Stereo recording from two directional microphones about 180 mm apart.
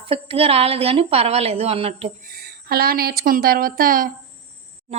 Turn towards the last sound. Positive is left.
turn(degrees=-55)  # may be behind; listen again after turning